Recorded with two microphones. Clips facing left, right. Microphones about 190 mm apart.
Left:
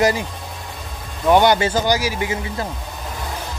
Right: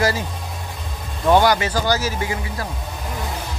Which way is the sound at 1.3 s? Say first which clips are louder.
Left 1 dB; 20° left (ahead or behind).